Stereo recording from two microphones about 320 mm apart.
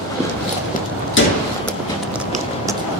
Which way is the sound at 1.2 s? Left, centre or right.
Left.